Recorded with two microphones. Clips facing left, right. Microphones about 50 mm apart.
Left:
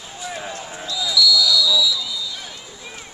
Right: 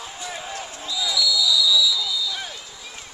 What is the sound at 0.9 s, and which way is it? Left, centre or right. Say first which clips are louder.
Basketball bounce: left 5 dB; centre.